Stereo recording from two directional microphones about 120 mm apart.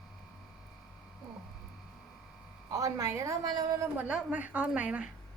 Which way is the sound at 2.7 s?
25° right (ahead or behind).